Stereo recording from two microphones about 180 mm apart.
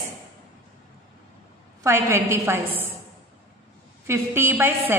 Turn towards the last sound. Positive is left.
turn(degrees=-10)  # may be behind; listen again after turning